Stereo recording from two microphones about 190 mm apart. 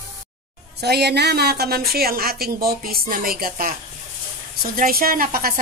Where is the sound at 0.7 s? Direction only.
60° right (ahead or behind).